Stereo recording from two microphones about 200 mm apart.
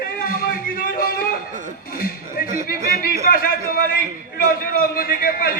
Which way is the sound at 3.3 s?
45° left (ahead or behind).